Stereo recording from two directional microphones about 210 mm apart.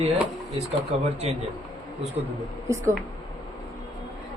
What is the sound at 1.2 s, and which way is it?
Speech, 30° right (ahead or behind).